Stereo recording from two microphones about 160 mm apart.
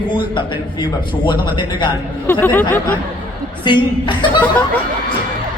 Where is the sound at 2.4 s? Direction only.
10° left (ahead or behind).